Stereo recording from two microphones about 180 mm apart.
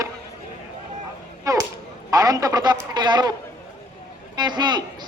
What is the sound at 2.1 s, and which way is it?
A man's voice, 20° right (ahead or behind).